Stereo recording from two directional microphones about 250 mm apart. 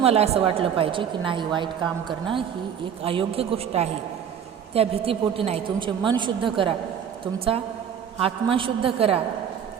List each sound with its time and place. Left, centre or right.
0.0 s a woman's voice: right
3.0 s a woman's voice: right
8.2 s a woman's voice: right